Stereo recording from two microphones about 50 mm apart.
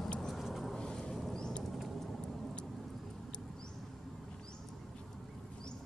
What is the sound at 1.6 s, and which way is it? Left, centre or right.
Vehicle, centre.